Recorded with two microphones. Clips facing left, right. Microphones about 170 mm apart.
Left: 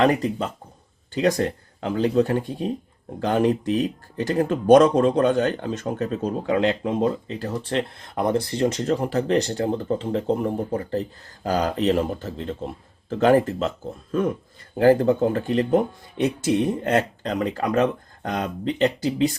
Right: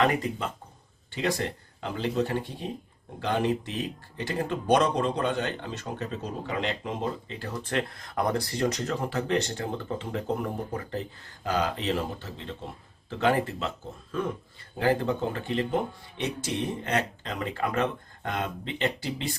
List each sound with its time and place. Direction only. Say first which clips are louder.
1.2 s speech: left 8 dB; 45° left (ahead or behind)